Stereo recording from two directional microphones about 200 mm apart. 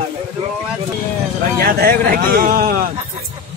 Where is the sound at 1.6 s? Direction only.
50° right (ahead or behind).